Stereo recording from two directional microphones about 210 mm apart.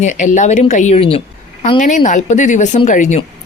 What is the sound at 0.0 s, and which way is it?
Speech, 35° left (ahead or behind).